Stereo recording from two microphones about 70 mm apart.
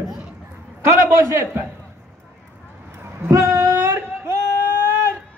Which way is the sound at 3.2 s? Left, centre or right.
Right.